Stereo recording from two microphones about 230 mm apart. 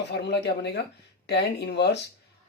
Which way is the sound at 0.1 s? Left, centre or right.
Left.